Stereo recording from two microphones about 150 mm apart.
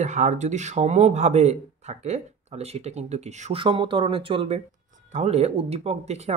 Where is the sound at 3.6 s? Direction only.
35° right (ahead or behind).